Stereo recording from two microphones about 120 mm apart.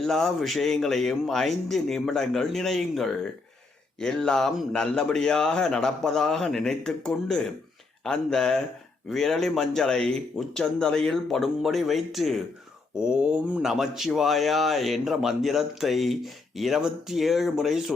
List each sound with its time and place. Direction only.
0.0 s speech: 5° left (ahead or behind)